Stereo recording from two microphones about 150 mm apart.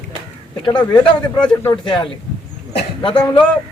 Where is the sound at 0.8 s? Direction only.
30° left (ahead or behind).